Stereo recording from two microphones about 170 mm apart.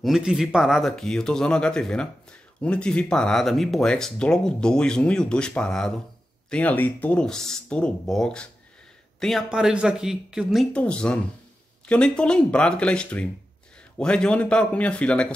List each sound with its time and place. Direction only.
0.0 s speech: 5° right (ahead or behind)